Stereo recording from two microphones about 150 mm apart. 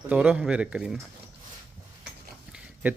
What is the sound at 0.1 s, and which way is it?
Speech, 10° right (ahead or behind).